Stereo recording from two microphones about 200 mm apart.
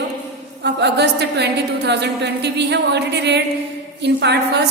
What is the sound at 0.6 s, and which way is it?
A woman's voice, 55° right (ahead or behind).